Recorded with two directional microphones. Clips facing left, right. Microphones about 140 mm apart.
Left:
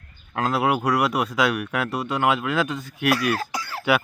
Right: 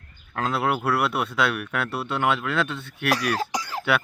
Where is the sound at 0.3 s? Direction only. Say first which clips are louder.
Left 3 dB; centre (ahead or behind).